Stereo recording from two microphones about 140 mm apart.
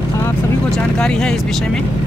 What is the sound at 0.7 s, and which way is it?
Speech, 5° left (ahead or behind).